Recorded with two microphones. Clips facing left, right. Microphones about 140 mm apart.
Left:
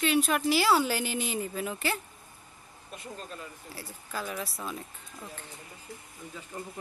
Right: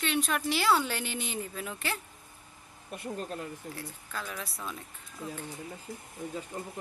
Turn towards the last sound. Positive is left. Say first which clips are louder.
# right 1 dB
turn(degrees=-20)  # may be behind; listen again after turning